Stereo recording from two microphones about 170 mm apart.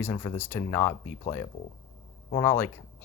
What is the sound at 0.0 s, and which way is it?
Speech, 15° left (ahead or behind).